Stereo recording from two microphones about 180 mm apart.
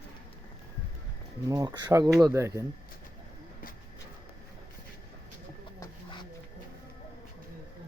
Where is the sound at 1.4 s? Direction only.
20° right (ahead or behind).